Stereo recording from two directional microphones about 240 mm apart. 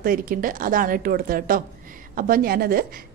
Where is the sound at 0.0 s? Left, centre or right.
Right.